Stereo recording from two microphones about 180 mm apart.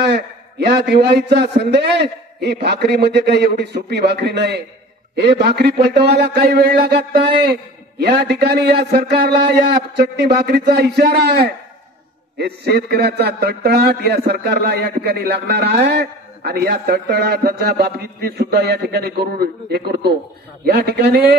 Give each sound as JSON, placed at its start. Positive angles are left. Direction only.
{"t": 0.1, "sound": "a man's voice", "side_deg": -65}
{"t": 8.3, "sound": "a man's voice", "side_deg": -65}
{"t": 12.4, "sound": "a man's voice", "side_deg": -65}